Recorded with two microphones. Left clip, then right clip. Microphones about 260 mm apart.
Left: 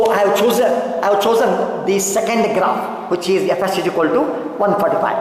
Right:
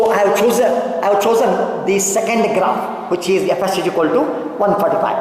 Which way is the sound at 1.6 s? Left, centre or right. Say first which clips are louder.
Right 1 dB; centre.